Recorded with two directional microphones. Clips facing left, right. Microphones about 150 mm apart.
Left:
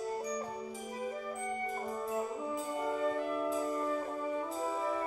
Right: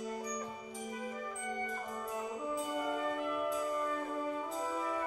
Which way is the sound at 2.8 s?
35° left (ahead or behind).